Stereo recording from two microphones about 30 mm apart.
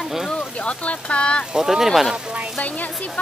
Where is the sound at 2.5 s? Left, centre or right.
Left.